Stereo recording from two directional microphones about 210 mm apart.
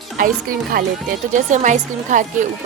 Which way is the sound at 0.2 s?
40° right (ahead or behind).